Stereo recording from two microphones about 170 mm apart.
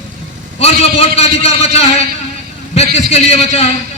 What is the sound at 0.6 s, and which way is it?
A man's voice, 40° left (ahead or behind).